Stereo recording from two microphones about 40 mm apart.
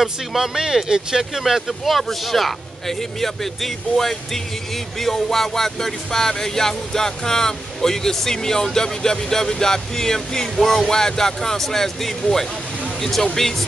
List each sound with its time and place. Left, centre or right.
0.0 s speech: centre
1.4 s music: centre